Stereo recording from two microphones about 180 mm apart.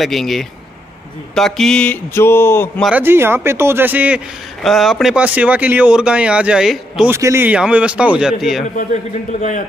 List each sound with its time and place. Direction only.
0.0 s speech: centre (ahead or behind)
2.8 s a man's voice: 10° right (ahead or behind)
7.1 s a man's voice: 15° right (ahead or behind)
8.7 s a man's voice: 45° left (ahead or behind)